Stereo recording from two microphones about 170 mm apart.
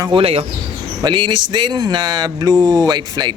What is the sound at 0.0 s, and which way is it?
Speech, 30° right (ahead or behind).